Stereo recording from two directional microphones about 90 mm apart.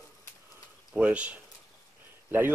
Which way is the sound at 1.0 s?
15° right (ahead or behind).